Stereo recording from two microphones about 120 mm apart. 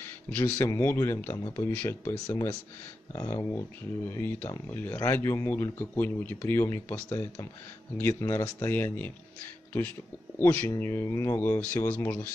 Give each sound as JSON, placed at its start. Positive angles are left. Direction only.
{"t": 0.4, "sound": "speech", "side_deg": 20}
{"t": 2.1, "sound": "speech", "side_deg": 35}
{"t": 3.1, "sound": "speech", "side_deg": 25}
{"t": 10.4, "sound": "speech", "side_deg": 20}